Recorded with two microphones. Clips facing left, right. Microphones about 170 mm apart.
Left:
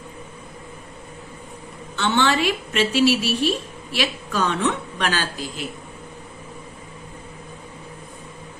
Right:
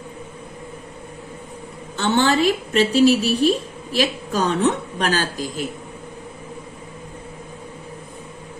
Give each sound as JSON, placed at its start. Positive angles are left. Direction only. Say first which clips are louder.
{"t": 2.0, "sound": "a woman's voice", "louder": "right 3 dB", "side_deg": -40}